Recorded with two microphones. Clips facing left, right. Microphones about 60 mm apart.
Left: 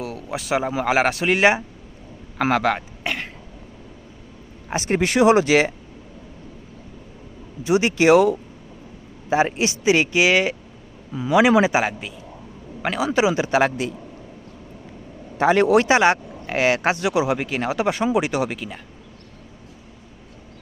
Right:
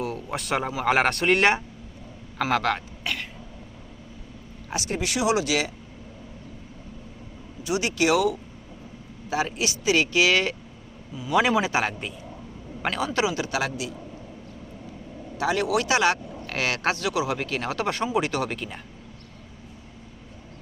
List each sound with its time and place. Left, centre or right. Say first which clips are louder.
0.0 s a sound: left 1 dB; centre
0.9 s a man's voice: even; centre
3.0 s throat clearing: left 4 dB; left
4.7 s speech: left 8 dB; left
7.6 s a man's voice: left 7 dB; left; by 13.1 s centre
13.1 s speech: left 10 dB; left
13.6 s a man's voice: left 8 dB; left
15.4 s speech: left 8 dB; left; by 18.5 s centre
18.5 s speech: left 2 dB; centre